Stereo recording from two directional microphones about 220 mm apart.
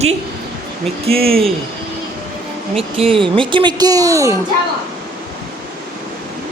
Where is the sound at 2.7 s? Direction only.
25° right (ahead or behind).